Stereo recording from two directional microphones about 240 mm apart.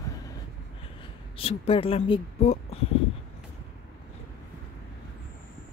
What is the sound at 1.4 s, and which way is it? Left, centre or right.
Speech, left.